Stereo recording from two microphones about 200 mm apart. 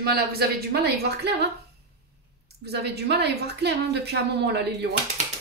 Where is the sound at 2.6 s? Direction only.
55° right (ahead or behind).